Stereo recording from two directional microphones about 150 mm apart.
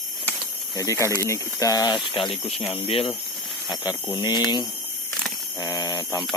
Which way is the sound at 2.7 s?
40° left (ahead or behind).